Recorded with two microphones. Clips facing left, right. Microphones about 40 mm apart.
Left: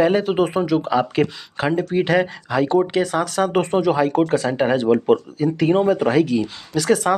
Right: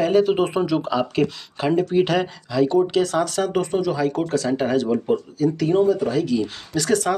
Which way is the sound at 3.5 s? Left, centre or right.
Left.